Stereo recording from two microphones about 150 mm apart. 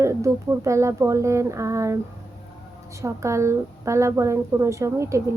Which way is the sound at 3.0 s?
20° right (ahead or behind).